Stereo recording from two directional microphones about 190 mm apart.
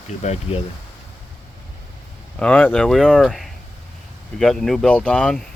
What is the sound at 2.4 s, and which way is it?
Speech, 5° left (ahead or behind).